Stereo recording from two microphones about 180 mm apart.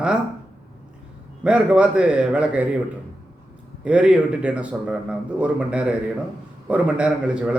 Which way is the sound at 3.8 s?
5° right (ahead or behind).